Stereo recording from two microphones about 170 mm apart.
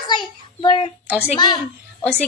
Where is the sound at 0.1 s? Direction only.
25° left (ahead or behind).